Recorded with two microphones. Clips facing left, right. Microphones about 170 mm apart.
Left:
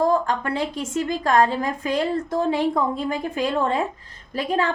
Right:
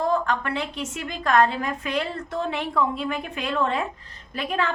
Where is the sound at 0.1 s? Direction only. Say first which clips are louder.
Left 2 dB; 40° left (ahead or behind).